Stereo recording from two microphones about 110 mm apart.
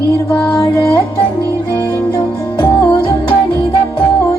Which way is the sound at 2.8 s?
40° left (ahead or behind).